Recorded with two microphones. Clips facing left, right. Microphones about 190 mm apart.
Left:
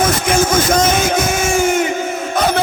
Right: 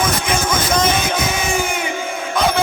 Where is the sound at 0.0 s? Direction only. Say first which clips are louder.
Left 5 dB; 50° left (ahead or behind).